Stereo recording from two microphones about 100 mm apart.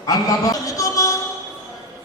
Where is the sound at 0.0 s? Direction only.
40° left (ahead or behind).